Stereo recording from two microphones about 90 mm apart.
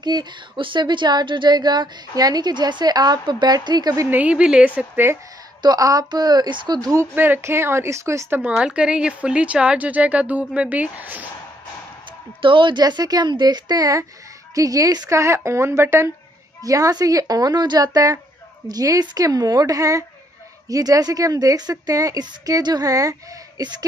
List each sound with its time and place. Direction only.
0.0 s a woman's voice: 55° right (ahead or behind)
4.1 s speech: 15° right (ahead or behind)
5.6 s a woman's voice: 45° right (ahead or behind)
7.2 s a woman's voice: 25° right (ahead or behind)
8.5 s speech: 10° right (ahead or behind)
12.4 s a woman's voice: 70° right (ahead or behind); by 16.1 s 30° right (ahead or behind)
16.6 s a woman's voice: 40° right (ahead or behind)
22.2 s a woman's voice: 50° right (ahead or behind)
23.6 s a woman's voice: 50° right (ahead or behind)